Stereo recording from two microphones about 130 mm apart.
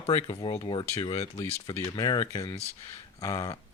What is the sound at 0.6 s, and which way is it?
Speech, 35° left (ahead or behind).